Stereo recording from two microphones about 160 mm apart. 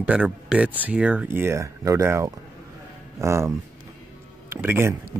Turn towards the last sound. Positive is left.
turn(degrees=-15)  # may be behind; listen again after turning